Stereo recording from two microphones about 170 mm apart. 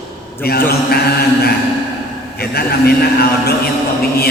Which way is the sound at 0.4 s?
65° left (ahead or behind).